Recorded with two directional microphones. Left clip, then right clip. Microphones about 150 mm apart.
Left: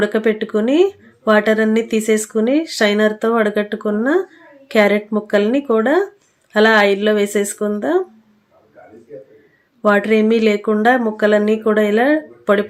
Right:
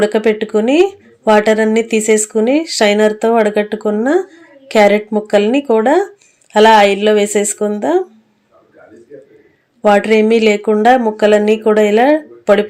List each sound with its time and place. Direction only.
0.0 s speech: 15° right (ahead or behind)
9.8 s speech: 20° right (ahead or behind)